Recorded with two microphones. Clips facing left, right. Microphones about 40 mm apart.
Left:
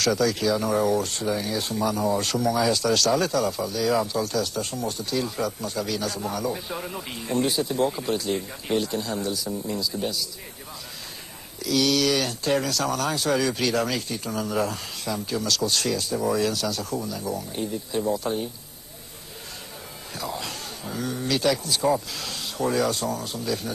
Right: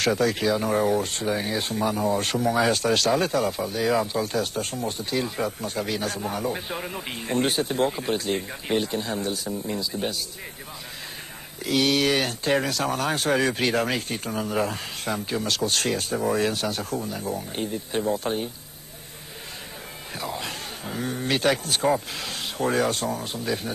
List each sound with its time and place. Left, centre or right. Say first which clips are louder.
0.0 s speech: even; right
6.8 s speech: right 1 dB; centre
7.2 s speech: even; right
7.9 s speech: even; right
9.7 s speech: even; right
11.6 s speech: even; right
14.3 s speech: even; right
20.2 s speech: even; right